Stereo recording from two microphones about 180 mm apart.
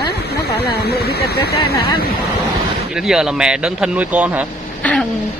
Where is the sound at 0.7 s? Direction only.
60° left (ahead or behind).